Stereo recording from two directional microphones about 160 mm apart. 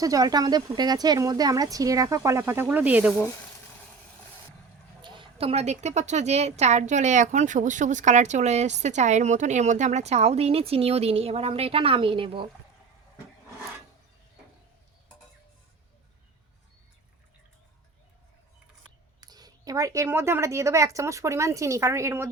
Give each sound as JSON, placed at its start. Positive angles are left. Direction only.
{"t": 0.0, "sound": "speech", "side_deg": -20}
{"t": 5.0, "sound": "a woman's voice", "side_deg": -30}
{"t": 19.2, "sound": "speech", "side_deg": -25}